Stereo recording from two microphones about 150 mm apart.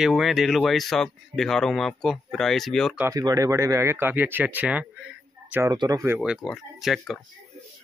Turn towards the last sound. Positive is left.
turn(degrees=0)  # may be behind; listen again after turning